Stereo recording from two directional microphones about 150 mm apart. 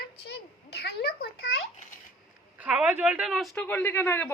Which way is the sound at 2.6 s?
10° right (ahead or behind).